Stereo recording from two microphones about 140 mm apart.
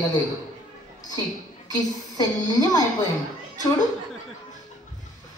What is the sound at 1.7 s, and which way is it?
Speech, 25° left (ahead or behind).